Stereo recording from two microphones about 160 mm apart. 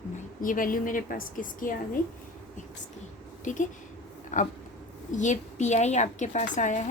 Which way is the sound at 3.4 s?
50° left (ahead or behind).